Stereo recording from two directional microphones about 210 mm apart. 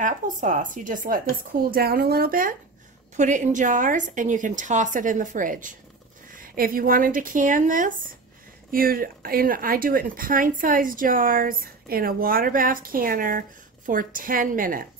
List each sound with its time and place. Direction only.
0.0 s a woman's voice: 40° right (ahead or behind)